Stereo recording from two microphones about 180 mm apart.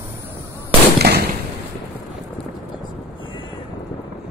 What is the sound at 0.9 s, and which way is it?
Fireworks, 65° right (ahead or behind).